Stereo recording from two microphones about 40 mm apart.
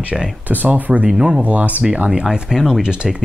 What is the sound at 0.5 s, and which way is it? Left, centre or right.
Speech, right.